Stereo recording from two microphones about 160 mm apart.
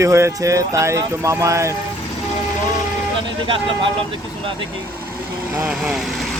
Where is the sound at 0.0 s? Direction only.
20° right (ahead or behind).